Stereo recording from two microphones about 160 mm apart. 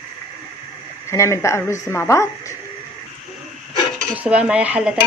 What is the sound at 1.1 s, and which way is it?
Speech, 15° left (ahead or behind).